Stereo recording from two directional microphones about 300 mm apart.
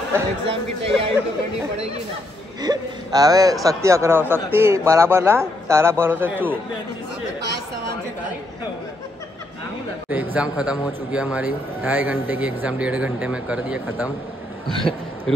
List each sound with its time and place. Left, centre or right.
0.5 s speech: centre
2.6 s a man's voice: centre
10.3 s a man's voice: centre